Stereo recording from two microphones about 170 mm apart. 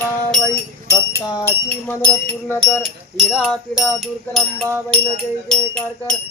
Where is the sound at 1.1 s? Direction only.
20° left (ahead or behind).